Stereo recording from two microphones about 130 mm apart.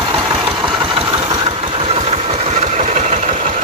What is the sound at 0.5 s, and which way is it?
Engine, 40° right (ahead or behind).